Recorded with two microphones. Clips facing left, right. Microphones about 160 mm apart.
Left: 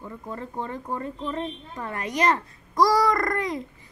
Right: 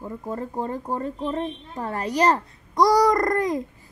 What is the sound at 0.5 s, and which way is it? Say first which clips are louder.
Speech: right 2 dB; 40° right (ahead or behind).